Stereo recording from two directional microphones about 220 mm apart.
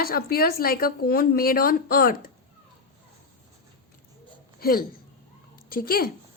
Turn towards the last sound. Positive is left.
turn(degrees=40)  # may be behind; listen again after turning